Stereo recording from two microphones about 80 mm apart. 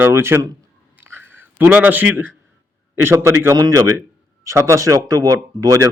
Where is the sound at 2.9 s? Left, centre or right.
Right.